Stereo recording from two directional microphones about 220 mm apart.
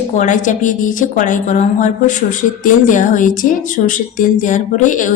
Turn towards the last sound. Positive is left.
turn(degrees=35)  # may be behind; listen again after turning